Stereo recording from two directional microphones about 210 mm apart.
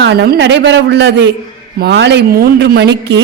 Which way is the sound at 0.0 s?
55° right (ahead or behind).